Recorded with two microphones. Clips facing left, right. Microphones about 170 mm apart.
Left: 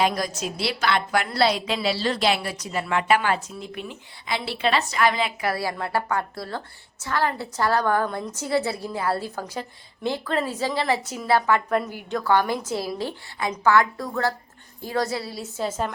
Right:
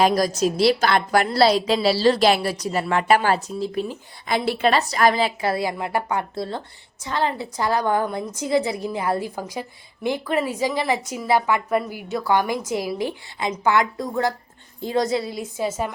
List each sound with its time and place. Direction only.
0.0 s a woman's voice: 40° right (ahead or behind); by 15.7 s 15° right (ahead or behind)